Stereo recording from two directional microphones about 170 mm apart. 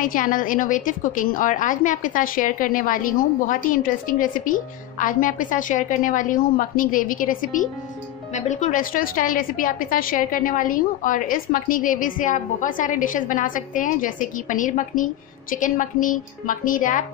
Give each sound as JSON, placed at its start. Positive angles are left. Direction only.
{"t": 0.0, "sound": "a woman's voice", "side_deg": 55}